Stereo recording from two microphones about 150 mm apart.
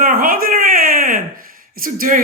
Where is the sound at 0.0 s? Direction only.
70° right (ahead or behind).